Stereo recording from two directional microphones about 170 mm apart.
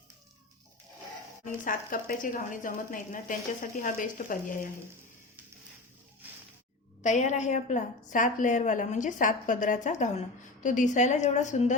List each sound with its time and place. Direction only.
1.5 s a woman's voice: 50° left (ahead or behind)
7.0 s a woman's voice: 45° left (ahead or behind)